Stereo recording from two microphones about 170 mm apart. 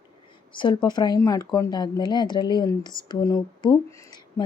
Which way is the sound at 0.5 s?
25° left (ahead or behind).